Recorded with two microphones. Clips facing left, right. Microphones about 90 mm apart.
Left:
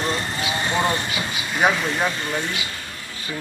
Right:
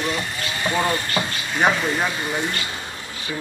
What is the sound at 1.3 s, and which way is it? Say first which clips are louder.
Speech: left 1 dB; 5° left (ahead or behind).